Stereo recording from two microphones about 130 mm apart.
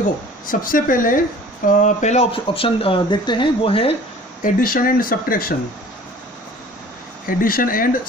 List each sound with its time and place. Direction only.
0.5 s speech: 90° left
1.7 s speech: 70° left (ahead or behind)
2.3 s speech: 45° left (ahead or behind)
4.4 s speech: 90° left
7.2 s speech: 90° left